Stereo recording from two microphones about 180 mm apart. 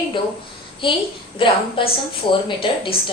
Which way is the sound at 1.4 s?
30° left (ahead or behind).